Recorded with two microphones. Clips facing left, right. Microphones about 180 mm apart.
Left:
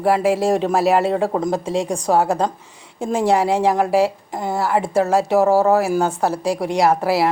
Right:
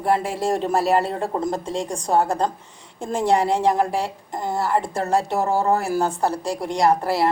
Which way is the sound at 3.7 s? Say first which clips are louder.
Left 3 dB; 70° left (ahead or behind).